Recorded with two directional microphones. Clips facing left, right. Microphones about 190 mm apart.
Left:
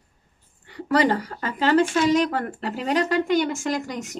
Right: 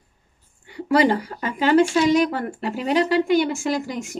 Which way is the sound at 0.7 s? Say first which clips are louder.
Right 2 dB; 10° right (ahead or behind).